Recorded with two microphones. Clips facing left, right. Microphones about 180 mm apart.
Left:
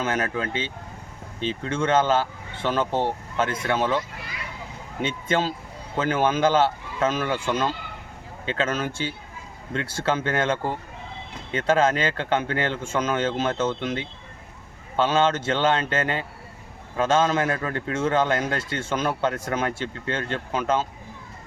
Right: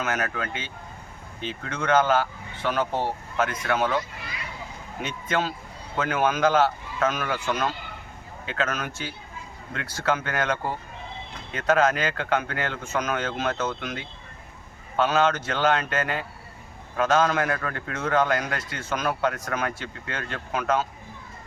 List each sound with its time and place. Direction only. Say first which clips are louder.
0.0 s a man's voice: left 3 dB; 30° left (ahead or behind)
5.0 s a man's voice: left 3 dB; 30° left (ahead or behind)